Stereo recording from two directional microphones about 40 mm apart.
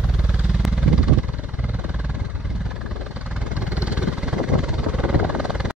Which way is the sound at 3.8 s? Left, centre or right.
Right.